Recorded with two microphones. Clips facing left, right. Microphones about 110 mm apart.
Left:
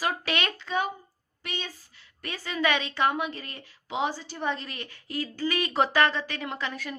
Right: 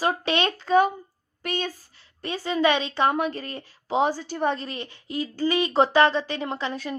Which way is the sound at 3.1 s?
40° right (ahead or behind).